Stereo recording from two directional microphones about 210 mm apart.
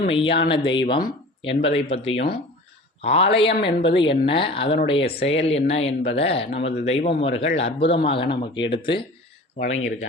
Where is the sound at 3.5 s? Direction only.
50° left (ahead or behind).